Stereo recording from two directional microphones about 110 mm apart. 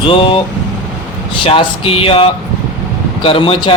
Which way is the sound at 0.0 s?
50° left (ahead or behind).